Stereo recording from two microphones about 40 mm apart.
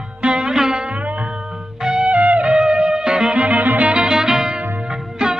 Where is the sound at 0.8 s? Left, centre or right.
Right.